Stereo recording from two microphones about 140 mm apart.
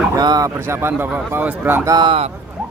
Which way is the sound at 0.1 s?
25° right (ahead or behind).